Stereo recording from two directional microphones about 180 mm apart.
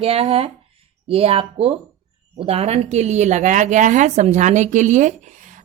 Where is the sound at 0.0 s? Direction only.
35° right (ahead or behind).